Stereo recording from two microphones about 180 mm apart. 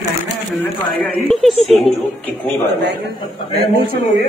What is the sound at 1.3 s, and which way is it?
Speech, centre (ahead or behind).